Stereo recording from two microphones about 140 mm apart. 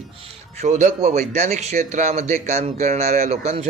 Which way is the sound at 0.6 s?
55° right (ahead or behind).